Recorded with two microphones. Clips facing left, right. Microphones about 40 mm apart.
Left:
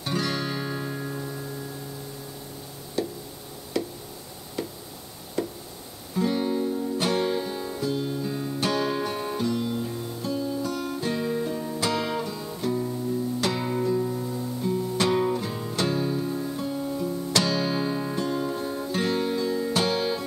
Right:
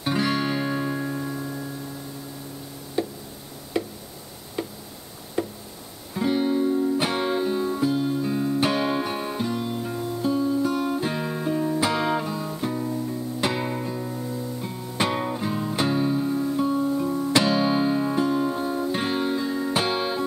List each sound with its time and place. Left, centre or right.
0.0 s music: centre
3.0 s tick-tock: centre
3.8 s tick: right
5.4 s tick-tock: right
6.1 s music: centre
14.6 s music: centre